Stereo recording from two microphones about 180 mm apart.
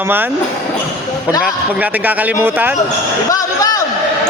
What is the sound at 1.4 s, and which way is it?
Speech, 10° right (ahead or behind).